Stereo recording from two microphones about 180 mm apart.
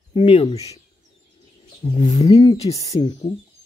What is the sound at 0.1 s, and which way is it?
Speech, 30° left (ahead or behind).